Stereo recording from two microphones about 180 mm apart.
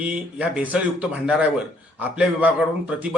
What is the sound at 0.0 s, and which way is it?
A man's voice, 5° right (ahead or behind).